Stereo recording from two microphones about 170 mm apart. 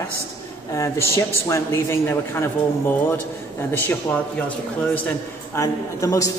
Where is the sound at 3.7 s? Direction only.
10° left (ahead or behind).